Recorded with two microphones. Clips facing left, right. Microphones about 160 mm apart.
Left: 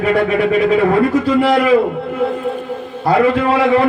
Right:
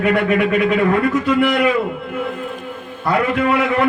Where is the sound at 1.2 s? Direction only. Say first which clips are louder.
Left 3 dB; 35° left (ahead or behind).